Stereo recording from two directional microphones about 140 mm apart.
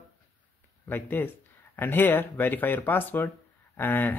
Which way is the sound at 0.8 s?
15° left (ahead or behind).